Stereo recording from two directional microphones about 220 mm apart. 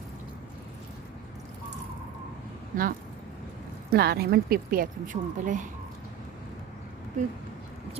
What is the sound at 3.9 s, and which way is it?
Speech, 45° right (ahead or behind).